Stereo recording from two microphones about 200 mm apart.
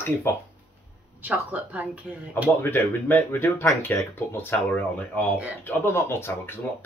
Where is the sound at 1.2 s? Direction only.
10° right (ahead or behind).